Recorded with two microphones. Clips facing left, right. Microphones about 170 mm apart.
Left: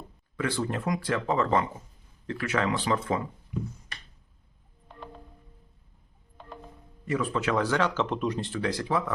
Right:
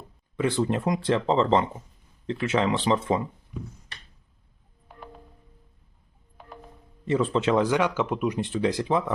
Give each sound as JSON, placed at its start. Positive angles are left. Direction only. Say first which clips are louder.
{"t": 0.3, "sound": "speech", "louder": "right 5 dB", "side_deg": -20}
{"t": 4.9, "sound": "music", "louder": "even", "side_deg": -5}
{"t": 6.4, "sound": "music", "louder": "left 1 dB", "side_deg": -5}
{"t": 7.0, "sound": "speech", "louder": "right 5 dB", "side_deg": -25}